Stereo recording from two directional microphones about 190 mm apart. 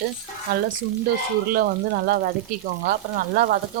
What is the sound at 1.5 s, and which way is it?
Speech, 50° right (ahead or behind).